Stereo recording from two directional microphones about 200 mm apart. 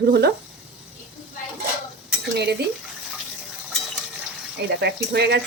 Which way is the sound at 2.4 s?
55° right (ahead or behind).